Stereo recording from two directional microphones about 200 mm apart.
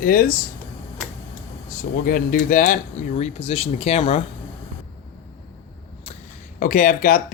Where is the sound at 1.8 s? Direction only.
45° left (ahead or behind); by 4.2 s 30° left (ahead or behind).